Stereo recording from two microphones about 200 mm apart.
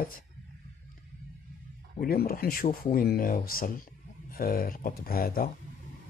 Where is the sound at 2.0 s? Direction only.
45° left (ahead or behind).